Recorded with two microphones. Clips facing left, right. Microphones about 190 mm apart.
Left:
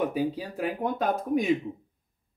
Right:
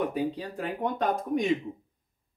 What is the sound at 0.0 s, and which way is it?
Speech, 5° left (ahead or behind).